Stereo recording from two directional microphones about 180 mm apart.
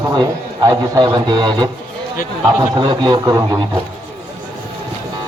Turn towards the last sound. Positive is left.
turn(degrees=-20)  # may be behind; listen again after turning